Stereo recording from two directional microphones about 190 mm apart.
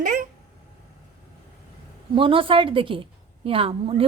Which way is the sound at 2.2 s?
25° right (ahead or behind).